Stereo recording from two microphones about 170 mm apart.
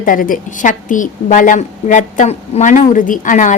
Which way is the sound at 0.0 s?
50° left (ahead or behind).